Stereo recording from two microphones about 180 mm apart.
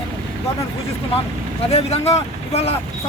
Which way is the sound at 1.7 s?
35° left (ahead or behind).